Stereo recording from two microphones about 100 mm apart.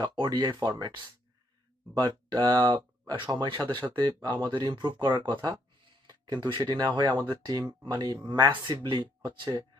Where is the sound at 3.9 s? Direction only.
45° right (ahead or behind).